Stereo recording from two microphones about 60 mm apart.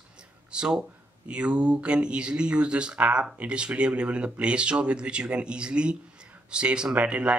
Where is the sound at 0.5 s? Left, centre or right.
Centre.